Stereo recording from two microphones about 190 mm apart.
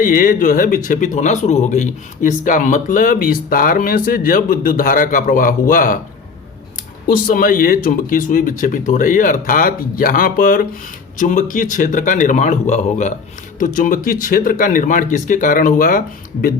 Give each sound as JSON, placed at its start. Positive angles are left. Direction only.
{"t": 0.0, "sound": "speech", "side_deg": 45}
{"t": 7.1, "sound": "speech", "side_deg": 50}